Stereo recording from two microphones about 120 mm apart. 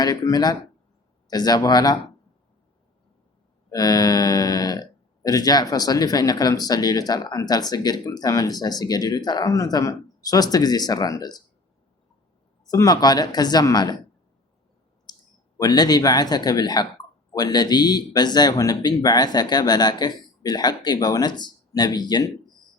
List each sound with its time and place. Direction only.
0.0 s speech: 30° left (ahead or behind)
3.7 s speech: 35° left (ahead or behind)
12.7 s speech: 30° left (ahead or behind)
15.1 s clicking: 35° left (ahead or behind)
15.5 s speech: 35° left (ahead or behind)